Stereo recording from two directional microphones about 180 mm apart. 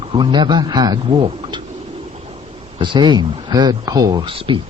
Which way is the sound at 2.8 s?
25° right (ahead or behind).